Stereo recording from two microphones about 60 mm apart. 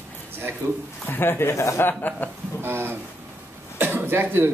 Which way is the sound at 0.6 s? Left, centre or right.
Right.